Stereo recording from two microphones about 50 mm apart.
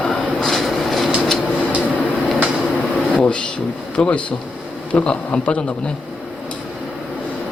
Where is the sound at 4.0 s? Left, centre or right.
Left.